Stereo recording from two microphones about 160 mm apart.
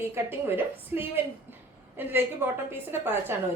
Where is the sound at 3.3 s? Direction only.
15° right (ahead or behind).